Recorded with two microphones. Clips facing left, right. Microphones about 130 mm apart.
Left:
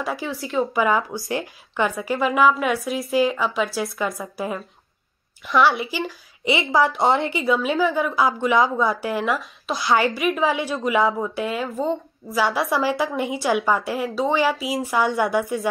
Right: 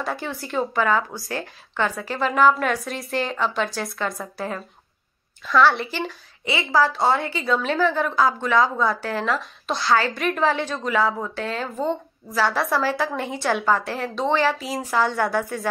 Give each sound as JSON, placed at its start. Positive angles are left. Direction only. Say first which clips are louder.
{"t": 0.0, "sound": "a woman's voice", "louder": "left 1 dB", "side_deg": 5}
{"t": 0.7, "sound": "a woman's voice", "louder": "even", "side_deg": 15}
{"t": 5.4, "sound": "a woman's voice", "louder": "even", "side_deg": 20}
{"t": 5.7, "sound": "a woman's voice", "louder": "even", "side_deg": 5}
{"t": 6.4, "sound": "a woman's voice", "louder": "left 1 dB", "side_deg": 20}
{"t": 7.5, "sound": "a woman's voice", "louder": "right 1 dB", "side_deg": 5}
{"t": 9.8, "sound": "a woman's voice", "louder": "left 1 dB", "side_deg": 15}
{"t": 10.1, "sound": "a woman's voice", "louder": "left 1 dB", "side_deg": 5}
{"t": 12.5, "sound": "a woman's voice", "louder": "left 1 dB", "side_deg": 15}